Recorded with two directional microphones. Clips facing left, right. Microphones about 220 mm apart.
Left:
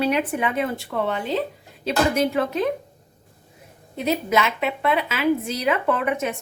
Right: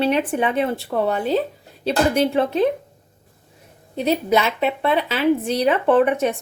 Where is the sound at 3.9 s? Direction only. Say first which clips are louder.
Right 3 dB; 30° right (ahead or behind).